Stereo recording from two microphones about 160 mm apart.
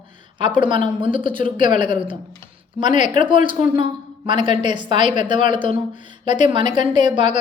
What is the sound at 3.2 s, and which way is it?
A woman's voice, 30° right (ahead or behind).